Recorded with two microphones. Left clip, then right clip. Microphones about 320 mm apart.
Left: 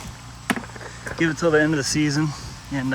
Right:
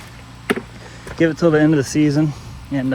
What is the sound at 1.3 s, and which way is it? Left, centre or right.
Speech, right.